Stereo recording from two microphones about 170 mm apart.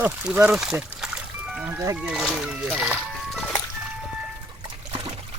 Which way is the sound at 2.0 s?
5° right (ahead or behind).